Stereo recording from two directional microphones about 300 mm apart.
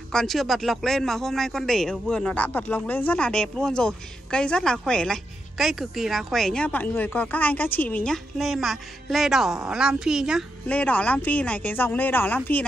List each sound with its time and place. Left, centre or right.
0.1 s a man's voice: centre